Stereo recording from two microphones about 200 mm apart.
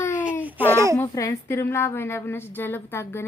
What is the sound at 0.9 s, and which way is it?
A woman's voice, 15° left (ahead or behind).